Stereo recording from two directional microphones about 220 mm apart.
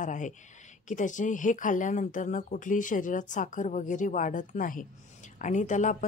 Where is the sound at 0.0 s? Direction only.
35° left (ahead or behind).